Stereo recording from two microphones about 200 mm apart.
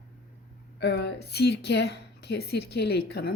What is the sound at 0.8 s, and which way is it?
A woman's voice, 55° left (ahead or behind).